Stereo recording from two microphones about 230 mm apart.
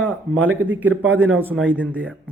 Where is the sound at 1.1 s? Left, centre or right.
Centre.